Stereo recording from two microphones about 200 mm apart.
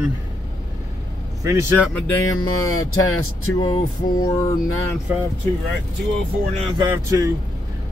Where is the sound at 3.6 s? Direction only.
25° left (ahead or behind).